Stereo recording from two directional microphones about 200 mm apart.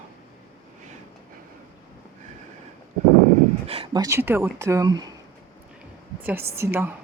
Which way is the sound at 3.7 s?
25° right (ahead or behind).